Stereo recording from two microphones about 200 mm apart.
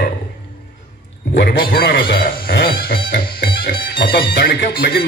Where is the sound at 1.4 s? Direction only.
50° left (ahead or behind).